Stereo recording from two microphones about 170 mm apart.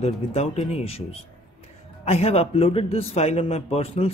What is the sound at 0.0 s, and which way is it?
Speech, 35° left (ahead or behind).